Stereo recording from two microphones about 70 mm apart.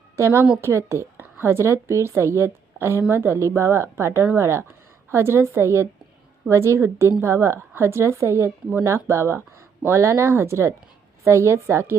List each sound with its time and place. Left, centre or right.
0.2 s a woman's voice: right